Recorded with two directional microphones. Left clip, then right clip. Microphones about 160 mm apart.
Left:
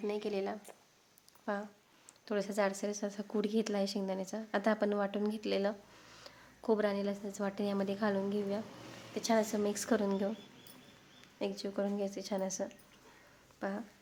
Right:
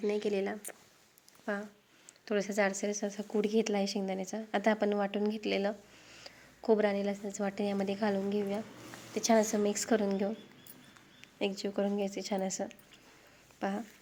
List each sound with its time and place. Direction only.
0.1 s a woman's voice: 15° right (ahead or behind)
9.1 s a woman's voice: 20° right (ahead or behind)
9.6 s a woman's voice: 5° right (ahead or behind)
11.3 s a woman's voice: 15° right (ahead or behind)